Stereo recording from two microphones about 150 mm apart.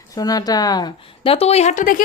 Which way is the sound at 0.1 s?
25° left (ahead or behind).